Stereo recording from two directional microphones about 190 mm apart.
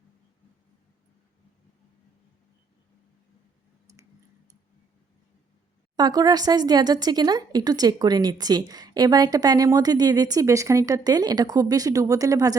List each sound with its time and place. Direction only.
3.9 s tick: 15° right (ahead or behind)
6.0 s speech: 20° right (ahead or behind)